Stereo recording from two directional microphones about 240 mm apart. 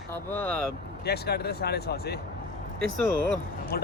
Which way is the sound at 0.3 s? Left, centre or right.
Centre.